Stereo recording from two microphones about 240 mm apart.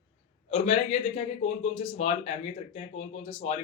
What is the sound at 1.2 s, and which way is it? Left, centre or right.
A man's voice, left.